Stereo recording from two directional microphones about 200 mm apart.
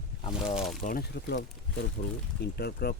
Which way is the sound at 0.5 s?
Centre (ahead or behind).